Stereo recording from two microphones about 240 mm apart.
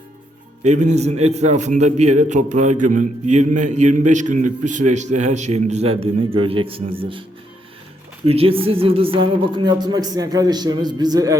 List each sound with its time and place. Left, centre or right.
0.6 s a man's voice: right